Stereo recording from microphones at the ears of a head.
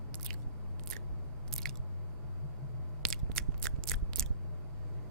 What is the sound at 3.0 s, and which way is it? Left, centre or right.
Biting, right.